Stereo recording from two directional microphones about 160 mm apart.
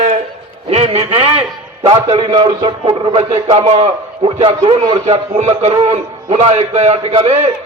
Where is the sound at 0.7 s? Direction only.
40° right (ahead or behind).